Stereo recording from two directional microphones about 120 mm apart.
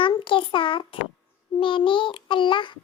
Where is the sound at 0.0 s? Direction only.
45° left (ahead or behind).